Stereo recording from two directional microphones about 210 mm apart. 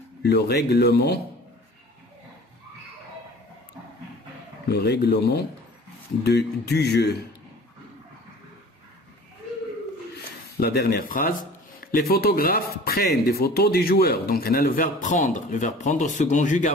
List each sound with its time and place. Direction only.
0.2 s speech: 50° left (ahead or behind)
4.6 s speech: 50° left (ahead or behind)
10.6 s a man's voice: 50° left (ahead or behind)